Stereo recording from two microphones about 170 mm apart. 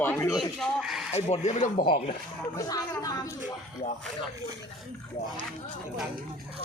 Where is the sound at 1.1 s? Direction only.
40° left (ahead or behind).